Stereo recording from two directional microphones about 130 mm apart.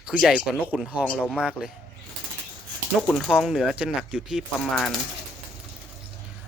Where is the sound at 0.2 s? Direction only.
Centre (ahead or behind).